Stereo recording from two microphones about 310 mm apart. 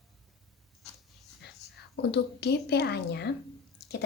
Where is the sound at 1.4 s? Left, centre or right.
Left.